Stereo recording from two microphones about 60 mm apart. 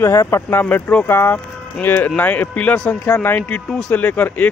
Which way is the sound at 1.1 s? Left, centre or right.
Left.